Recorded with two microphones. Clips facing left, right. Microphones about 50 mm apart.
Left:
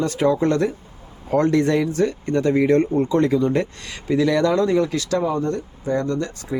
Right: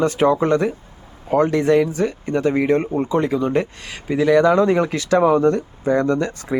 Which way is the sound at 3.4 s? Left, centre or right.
Right.